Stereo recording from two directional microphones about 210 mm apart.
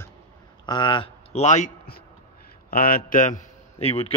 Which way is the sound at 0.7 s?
20° left (ahead or behind).